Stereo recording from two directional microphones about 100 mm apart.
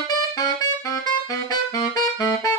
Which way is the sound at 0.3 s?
35° left (ahead or behind).